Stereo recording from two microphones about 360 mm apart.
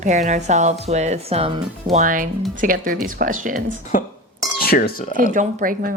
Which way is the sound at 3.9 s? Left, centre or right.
Left.